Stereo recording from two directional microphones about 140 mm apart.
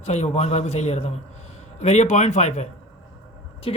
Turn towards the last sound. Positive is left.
turn(degrees=45)  # may be behind; listen again after turning